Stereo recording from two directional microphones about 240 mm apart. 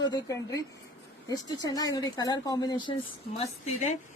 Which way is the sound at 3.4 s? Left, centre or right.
Left.